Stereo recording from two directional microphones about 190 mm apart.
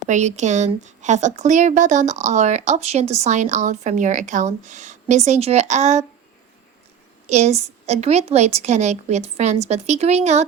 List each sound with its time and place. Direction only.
0.1 s a woman's voice: 40° right (ahead or behind)
7.3 s a woman's voice: 35° right (ahead or behind)